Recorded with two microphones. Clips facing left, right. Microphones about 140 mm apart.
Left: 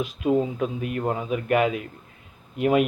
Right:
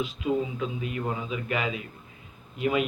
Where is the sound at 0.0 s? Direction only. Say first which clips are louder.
Left 5 dB; 50° left (ahead or behind).